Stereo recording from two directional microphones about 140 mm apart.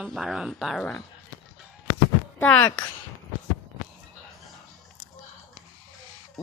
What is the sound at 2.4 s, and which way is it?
Speech, 10° left (ahead or behind).